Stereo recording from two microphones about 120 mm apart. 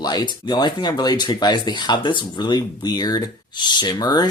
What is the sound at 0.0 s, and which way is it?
Speech, 35° left (ahead or behind).